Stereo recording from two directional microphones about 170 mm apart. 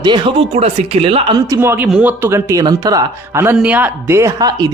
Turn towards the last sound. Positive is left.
turn(degrees=-20)  # may be behind; listen again after turning